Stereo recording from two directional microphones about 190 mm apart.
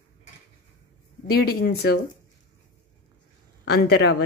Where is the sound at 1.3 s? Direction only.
55° left (ahead or behind).